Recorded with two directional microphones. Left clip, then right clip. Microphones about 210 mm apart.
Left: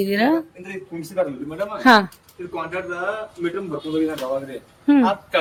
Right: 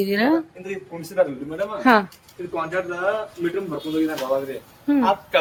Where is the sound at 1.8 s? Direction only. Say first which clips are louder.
Left 3 dB; 20° left (ahead or behind).